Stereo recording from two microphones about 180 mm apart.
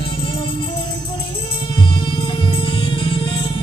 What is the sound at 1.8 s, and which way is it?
Music, 25° left (ahead or behind).